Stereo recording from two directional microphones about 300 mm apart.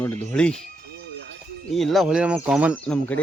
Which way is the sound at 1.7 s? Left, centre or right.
Centre.